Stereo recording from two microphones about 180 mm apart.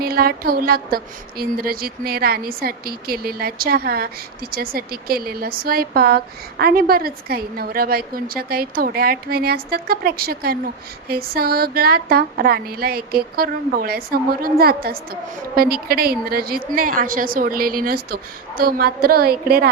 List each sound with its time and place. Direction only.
0.0 s speech: 60° right (ahead or behind)